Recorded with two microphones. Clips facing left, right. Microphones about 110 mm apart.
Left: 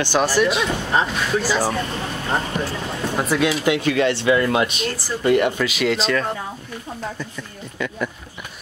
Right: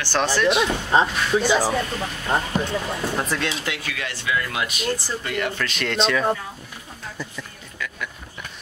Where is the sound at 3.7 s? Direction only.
30° left (ahead or behind).